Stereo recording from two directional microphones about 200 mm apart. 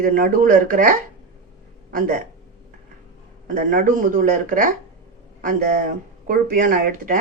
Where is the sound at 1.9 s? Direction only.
45° right (ahead or behind).